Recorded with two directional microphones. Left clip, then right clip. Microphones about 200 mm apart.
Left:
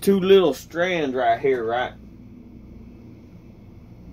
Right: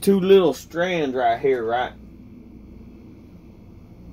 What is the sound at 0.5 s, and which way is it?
Speech, 15° right (ahead or behind).